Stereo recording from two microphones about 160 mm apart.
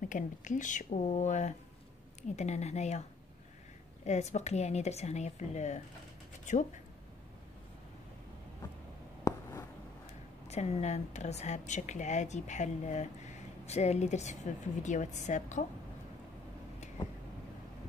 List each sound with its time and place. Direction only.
0.1 s a woman's voice: 50° left (ahead or behind)
4.0 s a woman's voice: 45° left (ahead or behind)
9.2 s writing: 20° left (ahead or behind)
10.5 s a woman's voice: 45° left (ahead or behind)